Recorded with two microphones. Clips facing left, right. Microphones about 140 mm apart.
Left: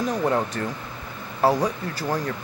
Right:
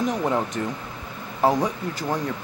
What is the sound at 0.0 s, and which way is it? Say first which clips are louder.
Speech: even; 20° right (ahead or behind).